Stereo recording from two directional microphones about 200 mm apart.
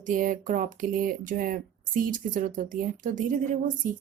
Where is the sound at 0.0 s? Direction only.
40° right (ahead or behind).